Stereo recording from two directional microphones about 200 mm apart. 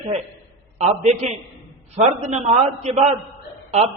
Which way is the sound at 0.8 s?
35° right (ahead or behind).